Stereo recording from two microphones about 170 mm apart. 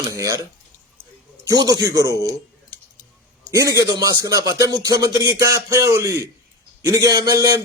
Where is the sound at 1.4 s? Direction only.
20° right (ahead or behind).